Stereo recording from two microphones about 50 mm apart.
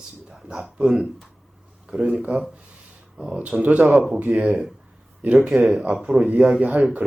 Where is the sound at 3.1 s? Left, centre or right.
Centre.